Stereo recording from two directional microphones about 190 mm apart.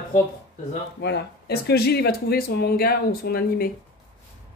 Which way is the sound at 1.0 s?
60° left (ahead or behind).